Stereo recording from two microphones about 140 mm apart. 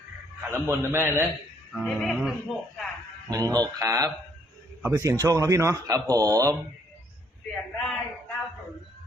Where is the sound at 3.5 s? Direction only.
25° right (ahead or behind).